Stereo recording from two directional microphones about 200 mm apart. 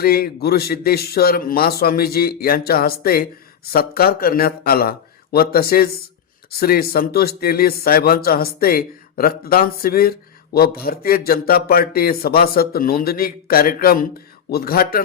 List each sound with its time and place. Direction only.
0.0 s speech: 50° left (ahead or behind)